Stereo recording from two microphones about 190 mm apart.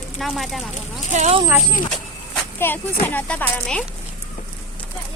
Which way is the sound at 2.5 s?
10° left (ahead or behind).